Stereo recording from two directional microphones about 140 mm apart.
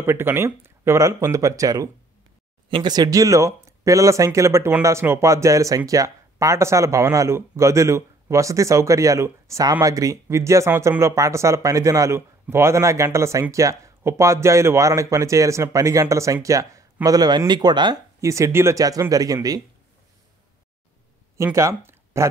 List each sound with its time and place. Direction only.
0.0 s speech: 15° right (ahead or behind)
21.5 s speech: 20° right (ahead or behind)